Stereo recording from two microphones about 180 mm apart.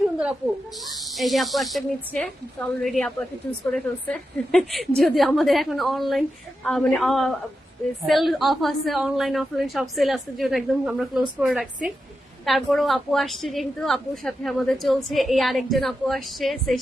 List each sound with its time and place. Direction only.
0.9 s a woman's voice: centre (ahead or behind)